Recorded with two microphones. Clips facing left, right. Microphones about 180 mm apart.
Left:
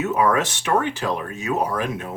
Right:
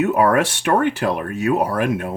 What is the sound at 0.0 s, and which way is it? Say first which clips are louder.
Speech: right 4 dB; 60° right (ahead or behind).